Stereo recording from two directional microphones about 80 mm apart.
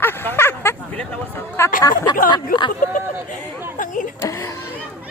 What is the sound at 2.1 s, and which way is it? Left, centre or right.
Speech, left.